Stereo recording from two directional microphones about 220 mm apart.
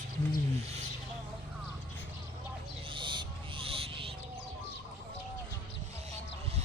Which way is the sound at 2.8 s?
20° right (ahead or behind).